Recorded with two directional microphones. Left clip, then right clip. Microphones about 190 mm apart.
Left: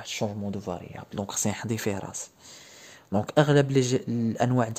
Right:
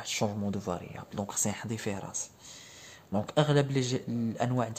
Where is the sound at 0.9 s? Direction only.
30° left (ahead or behind).